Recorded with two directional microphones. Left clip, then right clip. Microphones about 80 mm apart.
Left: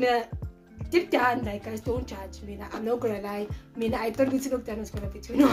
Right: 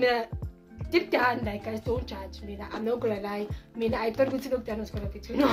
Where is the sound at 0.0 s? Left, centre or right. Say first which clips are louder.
Left 1 dB; right.